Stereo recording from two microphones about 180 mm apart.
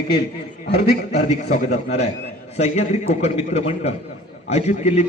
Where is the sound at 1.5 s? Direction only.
35° left (ahead or behind).